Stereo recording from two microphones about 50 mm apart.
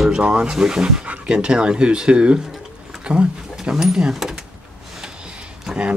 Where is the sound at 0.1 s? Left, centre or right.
Centre.